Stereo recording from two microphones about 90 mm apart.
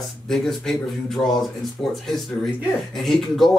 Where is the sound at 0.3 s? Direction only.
5° left (ahead or behind).